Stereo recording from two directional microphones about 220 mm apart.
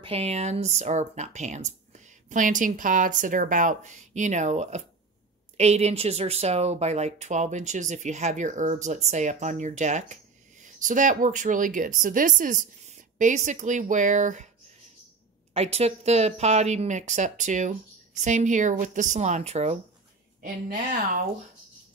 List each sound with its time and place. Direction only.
0.0 s speech: 25° right (ahead or behind)
15.5 s speech: 30° right (ahead or behind)